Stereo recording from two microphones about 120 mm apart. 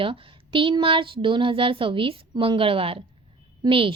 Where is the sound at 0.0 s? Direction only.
45° right (ahead or behind).